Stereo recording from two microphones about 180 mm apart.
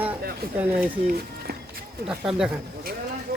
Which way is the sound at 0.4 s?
55° right (ahead or behind).